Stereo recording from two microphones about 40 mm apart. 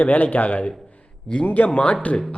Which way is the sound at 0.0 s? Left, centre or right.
Left.